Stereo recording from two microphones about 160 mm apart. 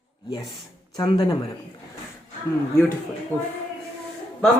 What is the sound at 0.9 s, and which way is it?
Speech, 25° left (ahead or behind).